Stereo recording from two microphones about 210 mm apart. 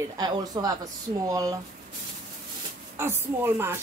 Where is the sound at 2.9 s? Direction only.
10° right (ahead or behind).